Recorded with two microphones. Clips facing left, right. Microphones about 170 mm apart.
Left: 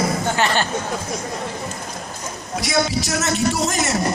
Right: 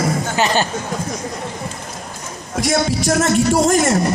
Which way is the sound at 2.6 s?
50° right (ahead or behind).